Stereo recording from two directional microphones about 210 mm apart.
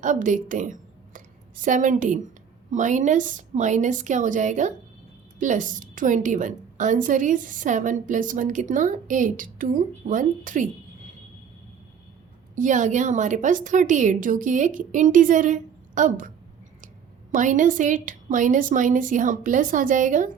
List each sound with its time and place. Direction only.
0.0 s a woman's voice: 40° right (ahead or behind)
12.5 s a woman's voice: 35° right (ahead or behind)
17.3 s a woman's voice: 40° right (ahead or behind)